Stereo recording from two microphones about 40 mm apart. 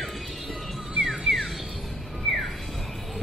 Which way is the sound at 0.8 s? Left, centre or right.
Right.